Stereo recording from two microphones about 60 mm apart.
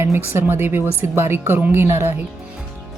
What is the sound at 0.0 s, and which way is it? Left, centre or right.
Speech, right.